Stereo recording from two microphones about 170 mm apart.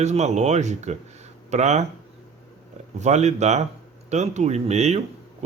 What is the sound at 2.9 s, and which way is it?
Speech, 40° right (ahead or behind).